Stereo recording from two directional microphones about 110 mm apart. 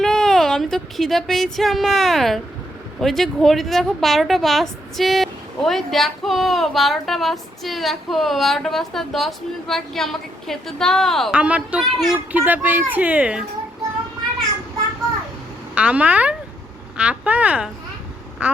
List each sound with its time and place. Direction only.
0.0 s a sound: 5° left (ahead or behind)
1.5 s a woman's voice: centre (ahead or behind)
11.3 s speech: 10° right (ahead or behind)
12.3 s speech: 15° right (ahead or behind)
15.7 s speech: 10° right (ahead or behind)